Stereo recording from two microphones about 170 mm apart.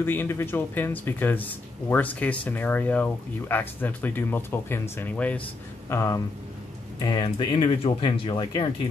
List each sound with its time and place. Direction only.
0.0 s speech: 15° left (ahead or behind); by 8.6 s 30° left (ahead or behind)